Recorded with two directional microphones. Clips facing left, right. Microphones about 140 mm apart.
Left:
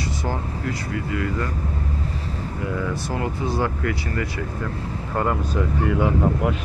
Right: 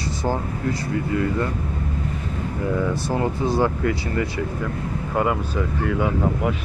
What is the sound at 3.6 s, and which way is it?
Speech, 25° right (ahead or behind).